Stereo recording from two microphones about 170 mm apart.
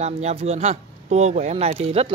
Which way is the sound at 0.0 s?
40° right (ahead or behind).